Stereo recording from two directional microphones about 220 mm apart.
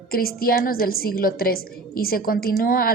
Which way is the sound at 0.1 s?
40° left (ahead or behind).